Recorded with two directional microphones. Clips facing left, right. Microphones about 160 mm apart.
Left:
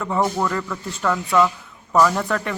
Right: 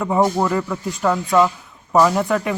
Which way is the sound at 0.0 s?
15° right (ahead or behind).